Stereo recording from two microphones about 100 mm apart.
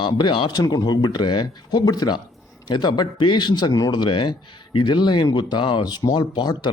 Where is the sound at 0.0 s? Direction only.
50° left (ahead or behind).